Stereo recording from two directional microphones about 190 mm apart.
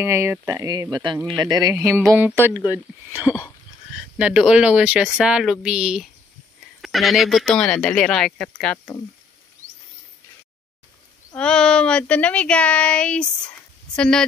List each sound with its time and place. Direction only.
0.0 s speech: 15° right (ahead or behind)
2.6 s speech: 20° left (ahead or behind)
4.2 s speech: 5° right (ahead or behind)
11.3 s speech: 5° left (ahead or behind)